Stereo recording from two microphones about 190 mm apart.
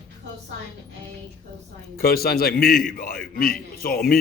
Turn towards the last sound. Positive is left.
turn(degrees=50)  # may be behind; listen again after turning